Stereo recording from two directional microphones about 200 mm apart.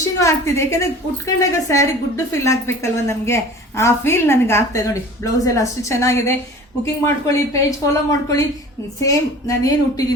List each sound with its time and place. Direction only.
0.2 s a woman's voice: 15° left (ahead or behind)